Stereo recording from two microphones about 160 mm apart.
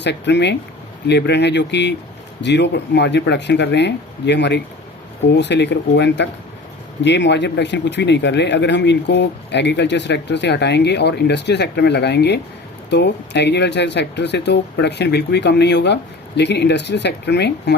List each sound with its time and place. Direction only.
0.0 s speech: 90° left